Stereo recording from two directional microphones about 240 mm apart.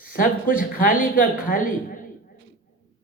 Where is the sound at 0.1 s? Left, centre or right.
Left.